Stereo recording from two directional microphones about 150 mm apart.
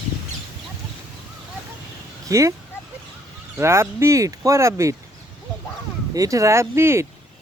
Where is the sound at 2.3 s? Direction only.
20° right (ahead or behind).